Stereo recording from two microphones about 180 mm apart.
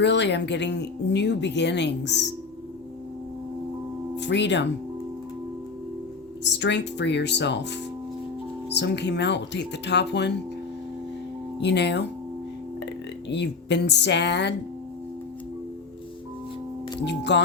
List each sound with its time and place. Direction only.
0.0 s speech: 75° left (ahead or behind)
4.2 s speech: 75° left (ahead or behind)
6.4 s speech: 75° left (ahead or behind)
11.6 s speech: 70° left (ahead or behind)
17.1 s speech: 75° left (ahead or behind)